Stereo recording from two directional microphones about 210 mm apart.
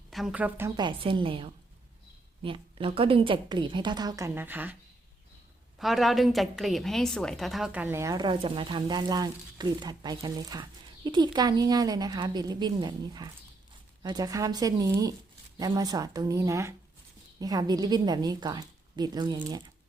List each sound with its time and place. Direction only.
0.1 s a woman's voice: centre (ahead or behind)
0.8 s a woman's voice: 20° right (ahead or behind)
5.8 s a woman's voice: centre (ahead or behind); by 19.6 s 20° right (ahead or behind)